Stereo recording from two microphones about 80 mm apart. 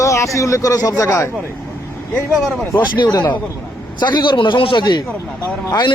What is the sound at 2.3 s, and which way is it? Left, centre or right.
Speech, centre.